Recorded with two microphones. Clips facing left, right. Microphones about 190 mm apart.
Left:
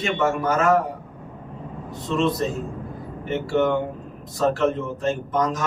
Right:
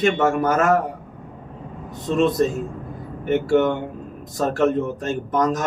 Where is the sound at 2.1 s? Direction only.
45° right (ahead or behind).